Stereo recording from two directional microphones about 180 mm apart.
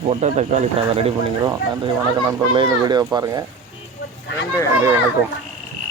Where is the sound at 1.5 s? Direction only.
20° right (ahead or behind).